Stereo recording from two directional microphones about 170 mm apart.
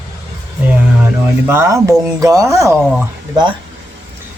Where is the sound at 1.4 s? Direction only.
15° right (ahead or behind).